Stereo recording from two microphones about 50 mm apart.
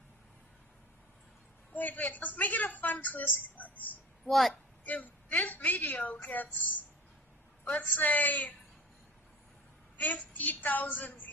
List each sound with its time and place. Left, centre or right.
1.7 s a woman's voice: left
4.3 s a woman's voice: centre
4.8 s a woman's voice: left
7.6 s a woman's voice: left
9.9 s a woman's voice: left